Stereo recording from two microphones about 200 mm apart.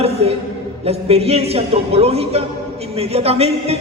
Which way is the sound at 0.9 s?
30° right (ahead or behind).